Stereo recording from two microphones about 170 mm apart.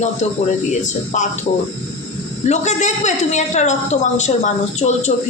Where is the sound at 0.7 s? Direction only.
45° left (ahead or behind).